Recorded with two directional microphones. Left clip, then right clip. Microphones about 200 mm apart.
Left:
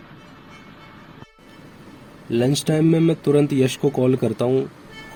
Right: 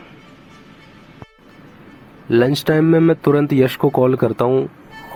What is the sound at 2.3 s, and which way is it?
Speech, 25° right (ahead or behind).